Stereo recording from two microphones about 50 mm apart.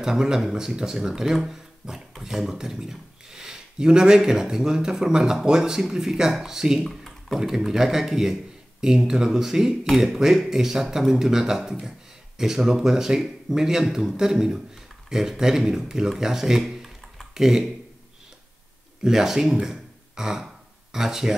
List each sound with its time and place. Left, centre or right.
0.0 s speech: centre
6.8 s a sound: centre
7.3 s speech: centre
19.0 s speech: centre
19.6 s beatboxing: centre
20.9 s speech: centre